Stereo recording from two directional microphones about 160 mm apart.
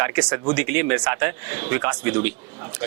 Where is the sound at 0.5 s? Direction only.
10° right (ahead or behind).